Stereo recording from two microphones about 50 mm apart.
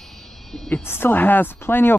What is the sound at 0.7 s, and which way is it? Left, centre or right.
Speech, left.